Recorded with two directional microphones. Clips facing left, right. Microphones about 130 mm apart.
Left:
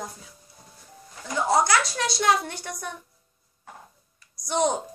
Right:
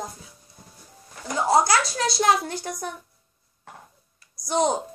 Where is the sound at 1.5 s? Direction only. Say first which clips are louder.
Right 2 dB; 35° right (ahead or behind).